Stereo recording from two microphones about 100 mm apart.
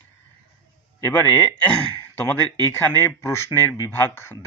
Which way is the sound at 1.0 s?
35° left (ahead or behind).